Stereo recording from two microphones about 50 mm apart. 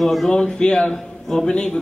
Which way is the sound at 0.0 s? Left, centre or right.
Centre.